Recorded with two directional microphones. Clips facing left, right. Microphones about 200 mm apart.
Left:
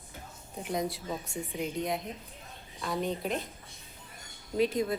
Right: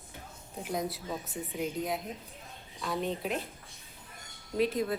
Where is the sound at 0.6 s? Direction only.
Centre (ahead or behind).